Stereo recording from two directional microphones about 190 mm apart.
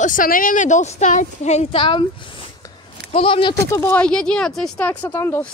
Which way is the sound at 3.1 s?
25° left (ahead or behind).